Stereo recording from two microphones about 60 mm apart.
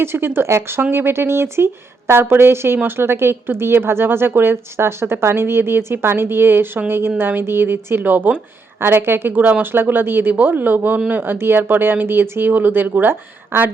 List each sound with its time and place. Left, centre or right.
0.0 s speech: right